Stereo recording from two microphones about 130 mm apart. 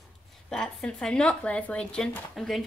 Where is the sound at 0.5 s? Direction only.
5° left (ahead or behind).